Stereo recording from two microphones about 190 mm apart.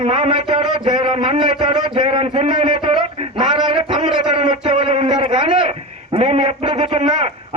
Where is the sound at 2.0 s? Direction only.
30° right (ahead or behind).